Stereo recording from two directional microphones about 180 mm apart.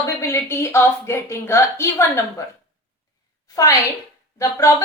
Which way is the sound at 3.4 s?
20° left (ahead or behind).